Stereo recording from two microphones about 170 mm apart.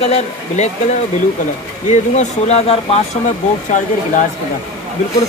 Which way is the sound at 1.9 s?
40° left (ahead or behind).